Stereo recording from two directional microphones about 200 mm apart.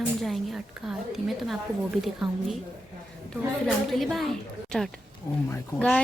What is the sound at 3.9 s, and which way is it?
A woman's voice, centre (ahead or behind).